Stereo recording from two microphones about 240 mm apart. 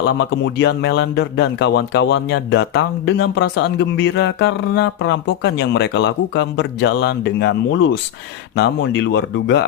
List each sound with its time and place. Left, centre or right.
0.0 s speech: left